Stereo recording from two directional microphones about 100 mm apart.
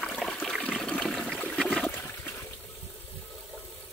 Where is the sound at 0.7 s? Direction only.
5° left (ahead or behind).